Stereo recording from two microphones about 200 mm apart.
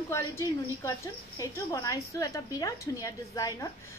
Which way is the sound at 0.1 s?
15° left (ahead or behind).